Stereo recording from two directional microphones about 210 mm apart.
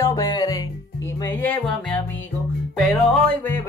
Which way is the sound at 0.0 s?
15° left (ahead or behind).